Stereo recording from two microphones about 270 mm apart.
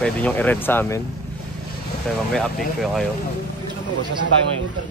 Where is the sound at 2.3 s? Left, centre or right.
Centre.